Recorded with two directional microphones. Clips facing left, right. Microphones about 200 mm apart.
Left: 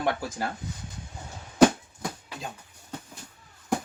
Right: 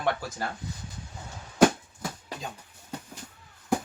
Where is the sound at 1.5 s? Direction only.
Centre (ahead or behind).